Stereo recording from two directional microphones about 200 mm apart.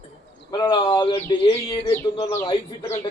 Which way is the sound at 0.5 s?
25° left (ahead or behind).